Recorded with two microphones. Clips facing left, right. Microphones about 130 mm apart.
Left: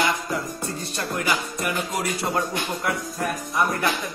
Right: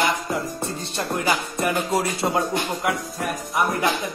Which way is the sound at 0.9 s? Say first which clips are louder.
Right 3 dB; 25° right (ahead or behind).